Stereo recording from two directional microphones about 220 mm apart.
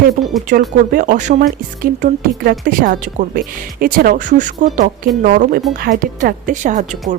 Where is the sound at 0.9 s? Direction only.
35° right (ahead or behind).